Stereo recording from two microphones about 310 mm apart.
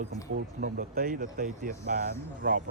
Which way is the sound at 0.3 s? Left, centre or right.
Right.